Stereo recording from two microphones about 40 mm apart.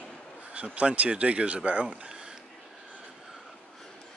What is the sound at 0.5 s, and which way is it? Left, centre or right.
Speech, right.